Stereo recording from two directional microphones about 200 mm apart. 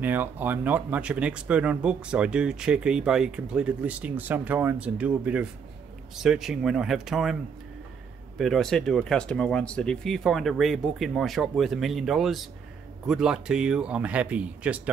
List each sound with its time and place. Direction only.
0.0 s speech: 10° right (ahead or behind)
8.4 s speech: centre (ahead or behind)